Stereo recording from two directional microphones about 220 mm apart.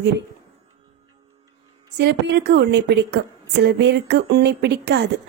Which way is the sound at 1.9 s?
50° right (ahead or behind).